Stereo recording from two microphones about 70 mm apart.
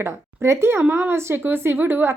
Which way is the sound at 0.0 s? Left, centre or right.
Right.